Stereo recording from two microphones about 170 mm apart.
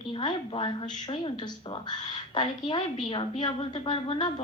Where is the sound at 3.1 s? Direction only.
30° left (ahead or behind).